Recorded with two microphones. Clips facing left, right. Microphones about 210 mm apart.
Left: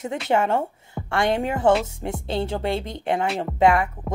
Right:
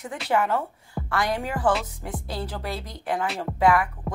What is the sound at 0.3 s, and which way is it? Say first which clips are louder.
Speech: left 2 dB; 25° left (ahead or behind).